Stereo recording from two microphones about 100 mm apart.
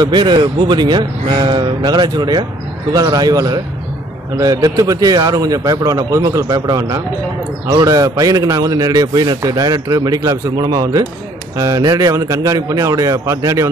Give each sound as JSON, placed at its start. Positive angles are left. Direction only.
{"t": 0.0, "sound": "speech", "side_deg": -50}